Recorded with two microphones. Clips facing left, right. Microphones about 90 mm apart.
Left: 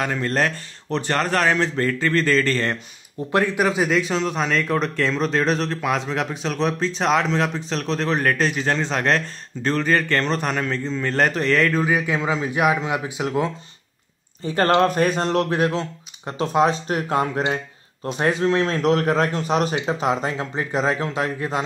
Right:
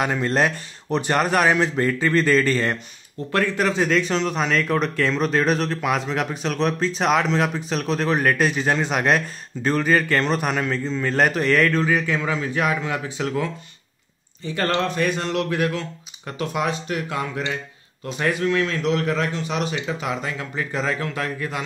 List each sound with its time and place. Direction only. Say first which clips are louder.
0.0 s speech: right 1 dB; 15° right (ahead or behind)
3.3 s speech: left 2 dB; 15° left (ahead or behind); by 11.8 s centre (ahead or behind)
11.8 s a man's voice: even; 15° left (ahead or behind)
14.4 s speech: left 5 dB; 40° left (ahead or behind)